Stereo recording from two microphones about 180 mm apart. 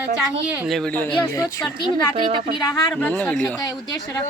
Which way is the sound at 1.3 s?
15° left (ahead or behind).